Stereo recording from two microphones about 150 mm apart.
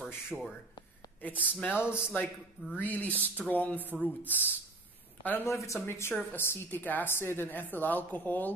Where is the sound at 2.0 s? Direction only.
10° left (ahead or behind).